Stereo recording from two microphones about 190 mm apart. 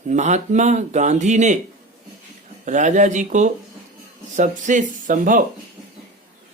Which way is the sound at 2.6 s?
40° right (ahead or behind).